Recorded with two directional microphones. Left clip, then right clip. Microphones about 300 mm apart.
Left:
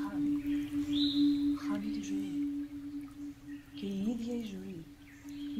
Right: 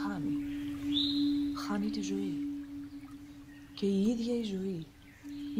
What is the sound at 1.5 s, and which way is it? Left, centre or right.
Speech, right.